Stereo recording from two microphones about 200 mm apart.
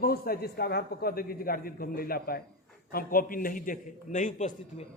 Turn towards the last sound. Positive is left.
turn(degrees=35)  # may be behind; listen again after turning